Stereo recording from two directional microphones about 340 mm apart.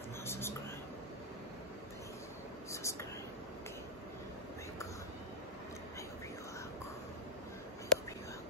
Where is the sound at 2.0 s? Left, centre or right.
Centre.